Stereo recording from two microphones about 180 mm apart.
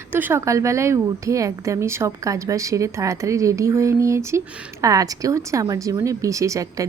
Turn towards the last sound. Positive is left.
turn(degrees=-20)  # may be behind; listen again after turning